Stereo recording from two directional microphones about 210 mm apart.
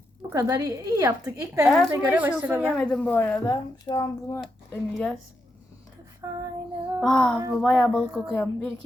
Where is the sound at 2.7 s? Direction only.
5° left (ahead or behind).